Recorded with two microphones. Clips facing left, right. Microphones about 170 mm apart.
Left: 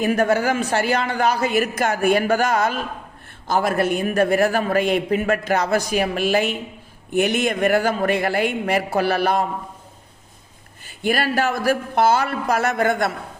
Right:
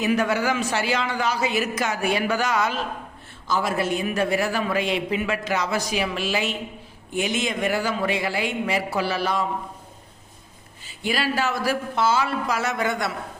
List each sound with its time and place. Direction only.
0.0 s a man's voice: 50° left (ahead or behind)
10.8 s a man's voice: 55° left (ahead or behind)